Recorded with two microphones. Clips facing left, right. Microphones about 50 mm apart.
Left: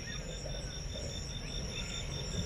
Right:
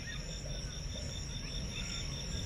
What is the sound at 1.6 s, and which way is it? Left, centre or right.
Cricket, centre.